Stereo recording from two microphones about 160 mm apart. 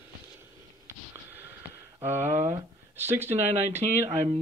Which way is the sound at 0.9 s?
15° right (ahead or behind).